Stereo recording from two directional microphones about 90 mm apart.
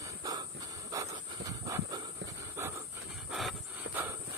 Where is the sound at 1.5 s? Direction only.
40° right (ahead or behind).